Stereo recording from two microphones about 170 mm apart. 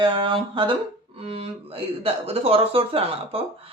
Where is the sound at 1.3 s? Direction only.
35° right (ahead or behind).